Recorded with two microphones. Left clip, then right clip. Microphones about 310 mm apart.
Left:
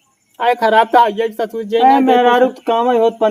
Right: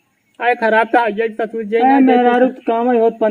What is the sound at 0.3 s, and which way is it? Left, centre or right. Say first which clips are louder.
Speech: left 2 dB; centre.